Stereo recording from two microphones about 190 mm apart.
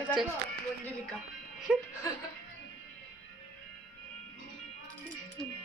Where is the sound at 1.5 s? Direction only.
5° right (ahead or behind).